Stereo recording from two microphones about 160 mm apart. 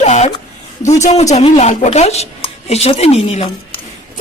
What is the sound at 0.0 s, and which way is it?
A woman's voice, 45° left (ahead or behind).